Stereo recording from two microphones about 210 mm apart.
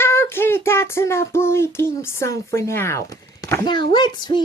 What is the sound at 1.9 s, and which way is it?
Speech, 15° left (ahead or behind).